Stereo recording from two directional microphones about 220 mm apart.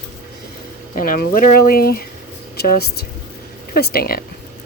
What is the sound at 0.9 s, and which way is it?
A woman's voice, 40° left (ahead or behind).